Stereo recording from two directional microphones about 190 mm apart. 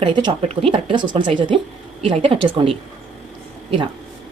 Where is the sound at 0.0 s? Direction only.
25° right (ahead or behind).